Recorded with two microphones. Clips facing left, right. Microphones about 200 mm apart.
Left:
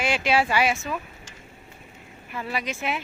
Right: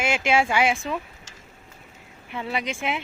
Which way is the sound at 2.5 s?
15° right (ahead or behind).